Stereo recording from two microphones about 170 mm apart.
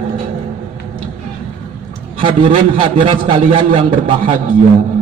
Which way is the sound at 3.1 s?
30° right (ahead or behind).